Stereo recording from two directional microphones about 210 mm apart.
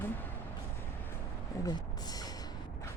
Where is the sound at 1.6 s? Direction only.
20° left (ahead or behind).